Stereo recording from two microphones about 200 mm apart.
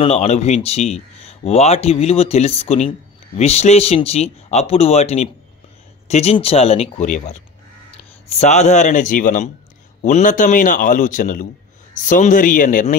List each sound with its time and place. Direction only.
0.0 s speech: 30° left (ahead or behind)